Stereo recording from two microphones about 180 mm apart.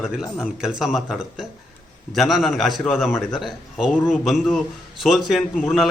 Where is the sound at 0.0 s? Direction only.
5° right (ahead or behind).